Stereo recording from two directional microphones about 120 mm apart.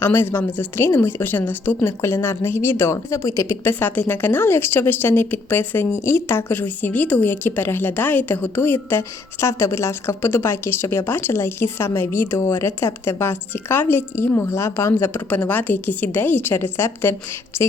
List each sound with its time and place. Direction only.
0.0 s a woman's voice: 20° left (ahead or behind)